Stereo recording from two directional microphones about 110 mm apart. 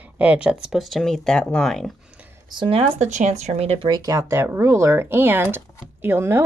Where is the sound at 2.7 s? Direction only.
80° right.